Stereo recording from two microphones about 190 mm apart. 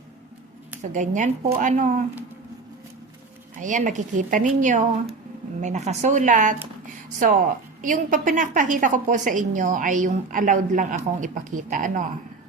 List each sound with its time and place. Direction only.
0.8 s a woman's voice: 40° right (ahead or behind)
3.6 s a woman's voice: 40° right (ahead or behind)